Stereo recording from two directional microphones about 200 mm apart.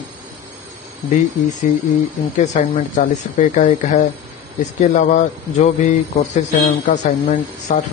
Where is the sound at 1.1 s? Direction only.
40° left (ahead or behind).